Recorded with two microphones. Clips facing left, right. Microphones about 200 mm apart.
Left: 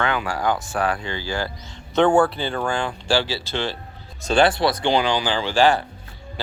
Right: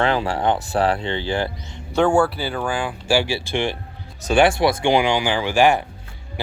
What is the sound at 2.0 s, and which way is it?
Speech, 10° right (ahead or behind).